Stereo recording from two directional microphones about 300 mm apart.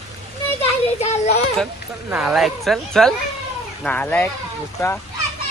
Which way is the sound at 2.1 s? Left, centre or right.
Centre.